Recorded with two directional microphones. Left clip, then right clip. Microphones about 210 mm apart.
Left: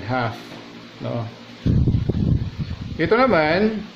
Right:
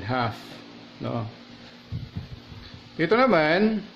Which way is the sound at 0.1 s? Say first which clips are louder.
Left 3 dB; 25° right (ahead or behind).